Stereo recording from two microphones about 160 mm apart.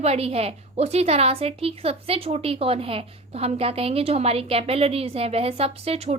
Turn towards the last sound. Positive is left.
turn(degrees=-40)  # may be behind; listen again after turning